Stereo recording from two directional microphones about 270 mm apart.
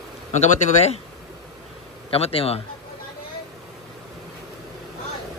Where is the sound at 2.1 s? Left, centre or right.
Left.